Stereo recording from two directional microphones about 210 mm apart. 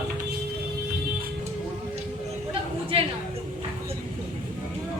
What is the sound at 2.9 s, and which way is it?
Speech, 30° right (ahead or behind).